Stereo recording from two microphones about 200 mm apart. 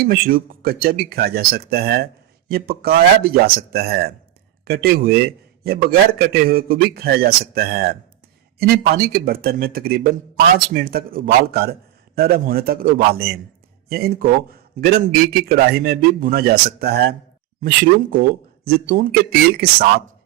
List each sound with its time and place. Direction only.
0.0 s speech: 45° right (ahead or behind)